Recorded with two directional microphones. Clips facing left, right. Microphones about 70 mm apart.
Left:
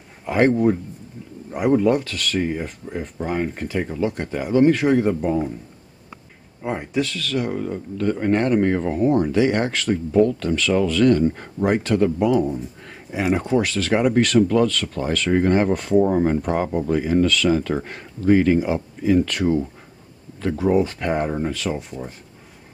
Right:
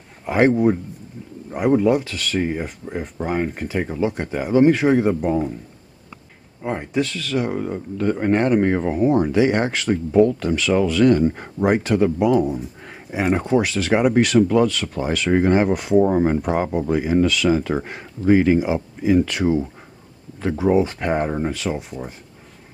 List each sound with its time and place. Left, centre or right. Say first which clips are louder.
0.2 s a man's voice: right 1 dB; centre
1.5 s speech: right 1 dB; centre
6.6 s speech: right 1 dB; centre
7.2 s speech: right 1 dB; centre
13.6 s speech: right 1 dB; centre